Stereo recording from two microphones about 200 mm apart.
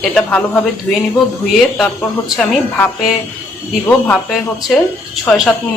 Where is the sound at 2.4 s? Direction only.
Centre (ahead or behind).